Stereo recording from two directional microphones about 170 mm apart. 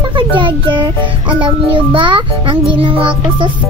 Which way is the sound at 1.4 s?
30° right (ahead or behind).